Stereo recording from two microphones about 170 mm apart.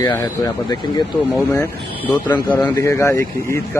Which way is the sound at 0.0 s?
25° left (ahead or behind).